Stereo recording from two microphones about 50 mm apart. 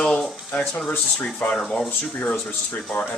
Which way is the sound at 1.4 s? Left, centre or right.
Left.